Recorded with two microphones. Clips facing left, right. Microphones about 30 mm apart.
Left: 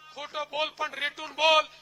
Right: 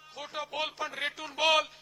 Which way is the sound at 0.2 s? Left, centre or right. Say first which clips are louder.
Left 3 dB; centre.